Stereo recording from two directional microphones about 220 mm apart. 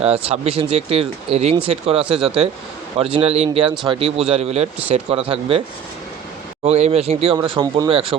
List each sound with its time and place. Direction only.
0.0 s a man's voice: 30° right (ahead or behind)
6.7 s a man's voice: 30° right (ahead or behind)